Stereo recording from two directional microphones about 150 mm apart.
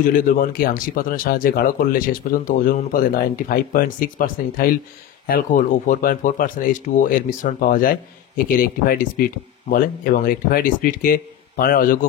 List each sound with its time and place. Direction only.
0.0 s speech: 65° left (ahead or behind)